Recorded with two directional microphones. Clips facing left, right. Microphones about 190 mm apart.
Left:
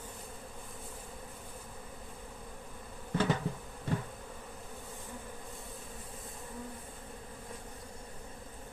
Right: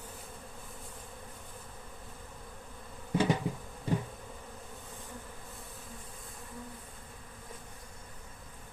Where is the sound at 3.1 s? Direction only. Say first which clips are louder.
Right 2 dB; 15° right (ahead or behind).